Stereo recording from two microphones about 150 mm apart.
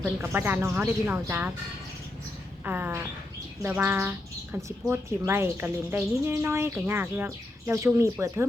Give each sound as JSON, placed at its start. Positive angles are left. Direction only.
{"t": 0.0, "sound": "speech", "side_deg": -15}
{"t": 2.6, "sound": "speech", "side_deg": -15}